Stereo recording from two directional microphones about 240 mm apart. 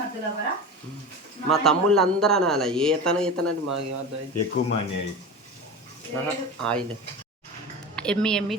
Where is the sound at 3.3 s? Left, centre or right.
Right.